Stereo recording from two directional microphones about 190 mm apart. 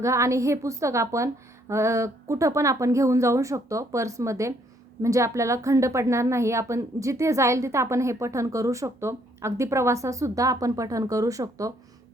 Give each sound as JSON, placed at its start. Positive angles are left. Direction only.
{"t": 0.0, "sound": "a woman's voice", "side_deg": -15}